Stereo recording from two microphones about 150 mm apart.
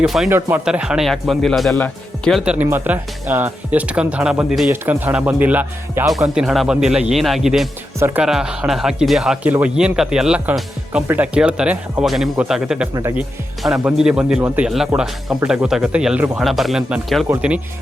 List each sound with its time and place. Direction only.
0.0 s speech: centre (ahead or behind)
0.3 s speech: 15° right (ahead or behind); by 2.4 s 5° left (ahead or behind)
2.4 s speech: 10° right (ahead or behind)
7.9 s speech: 15° right (ahead or behind)
8.2 s speech: 5° right (ahead or behind)
12.9 s speech: 20° right (ahead or behind)
13.1 s speech: 5° right (ahead or behind)